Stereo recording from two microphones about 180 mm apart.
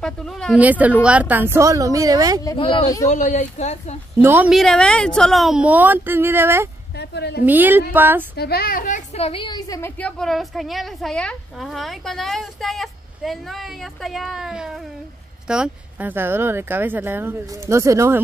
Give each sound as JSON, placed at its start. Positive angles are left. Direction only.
{"t": 0.0, "sound": "a woman's voice", "side_deg": 5}
{"t": 0.6, "sound": "speech", "side_deg": -10}
{"t": 2.4, "sound": "speech", "side_deg": 25}
{"t": 3.1, "sound": "speech", "side_deg": 45}
{"t": 4.2, "sound": "speech", "side_deg": -10}
{"t": 4.6, "sound": "a woman's voice", "side_deg": 5}
{"t": 7.0, "sound": "a woman's voice", "side_deg": 70}
{"t": 7.4, "sound": "speech", "side_deg": -10}
{"t": 8.4, "sound": "a woman's voice", "side_deg": 60}